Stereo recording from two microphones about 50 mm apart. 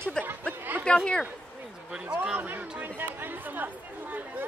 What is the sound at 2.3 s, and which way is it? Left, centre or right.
Speech, right.